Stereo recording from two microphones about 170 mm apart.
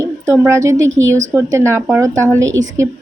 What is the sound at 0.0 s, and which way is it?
A woman's voice, 15° right (ahead or behind).